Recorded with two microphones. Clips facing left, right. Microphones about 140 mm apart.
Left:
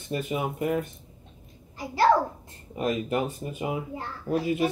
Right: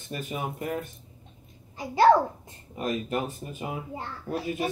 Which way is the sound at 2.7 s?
15° left (ahead or behind).